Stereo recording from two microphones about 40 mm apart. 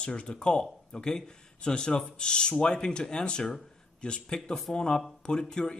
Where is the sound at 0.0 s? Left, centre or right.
Left.